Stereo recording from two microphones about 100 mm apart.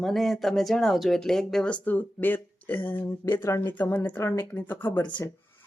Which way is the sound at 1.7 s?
15° left (ahead or behind).